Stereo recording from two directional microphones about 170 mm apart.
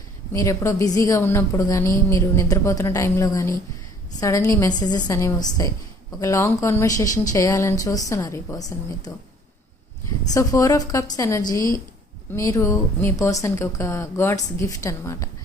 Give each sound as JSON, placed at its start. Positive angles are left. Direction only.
{"t": 0.3, "sound": "a woman's voice", "side_deg": 20}
{"t": 10.3, "sound": "a woman's voice", "side_deg": 20}